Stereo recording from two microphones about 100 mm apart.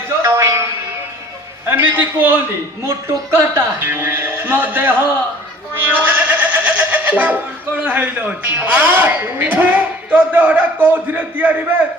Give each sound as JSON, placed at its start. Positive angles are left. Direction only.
{"t": 0.2, "sound": "music", "side_deg": -25}
{"t": 1.6, "sound": "speech", "side_deg": -20}